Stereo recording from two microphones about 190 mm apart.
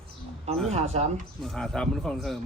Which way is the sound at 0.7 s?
35° right (ahead or behind).